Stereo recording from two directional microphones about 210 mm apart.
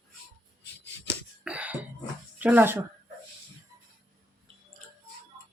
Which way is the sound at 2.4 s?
10° right (ahead or behind).